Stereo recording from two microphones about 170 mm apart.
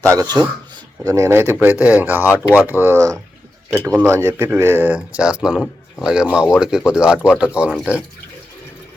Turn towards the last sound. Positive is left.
turn(degrees=-5)  # may be behind; listen again after turning